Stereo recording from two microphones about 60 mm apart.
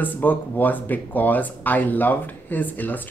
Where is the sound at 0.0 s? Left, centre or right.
Left.